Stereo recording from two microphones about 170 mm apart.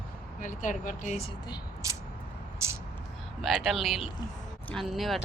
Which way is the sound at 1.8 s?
20° right (ahead or behind).